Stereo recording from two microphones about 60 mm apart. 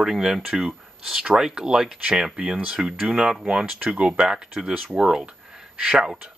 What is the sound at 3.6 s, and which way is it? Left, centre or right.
A man's voice, right.